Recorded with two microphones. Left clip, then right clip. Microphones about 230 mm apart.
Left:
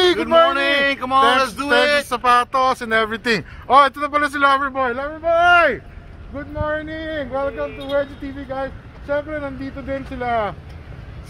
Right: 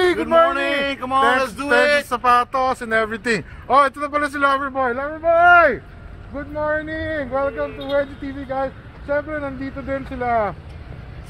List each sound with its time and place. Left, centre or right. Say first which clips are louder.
0.3 s a sound: left 1 dB; centre
1.6 s speech: even; centre
2.0 s a man's voice: even; centre
4.7 s speech: even; right